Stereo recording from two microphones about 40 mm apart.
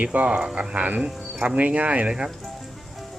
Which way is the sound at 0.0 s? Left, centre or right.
Right.